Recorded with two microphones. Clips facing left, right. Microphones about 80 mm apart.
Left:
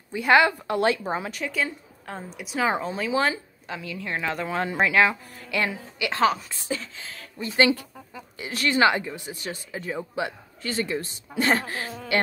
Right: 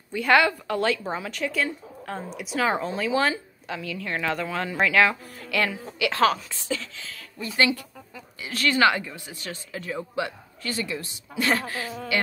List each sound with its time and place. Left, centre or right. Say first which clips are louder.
0.3 s a woman's voice: left 1 dB; centre
0.7 s speech: left 2 dB; left
1.3 s a woman's voice: right 1 dB; centre
4.5 s speech: left 2 dB; left
4.8 s a woman's voice: right 1 dB; centre
6.7 s a woman's voice: even; left